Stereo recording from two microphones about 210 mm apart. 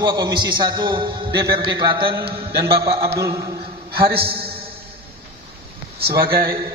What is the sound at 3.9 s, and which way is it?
Speech, 50° right (ahead or behind).